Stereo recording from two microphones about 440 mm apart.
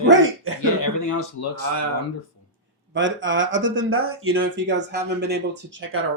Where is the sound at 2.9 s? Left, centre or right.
Right.